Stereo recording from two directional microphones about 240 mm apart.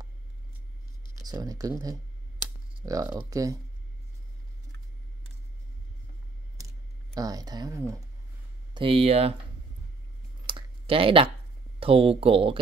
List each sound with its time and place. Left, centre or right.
1.2 s speech: centre
7.2 s speech: centre
10.4 s a sound: right
11.8 s speech: right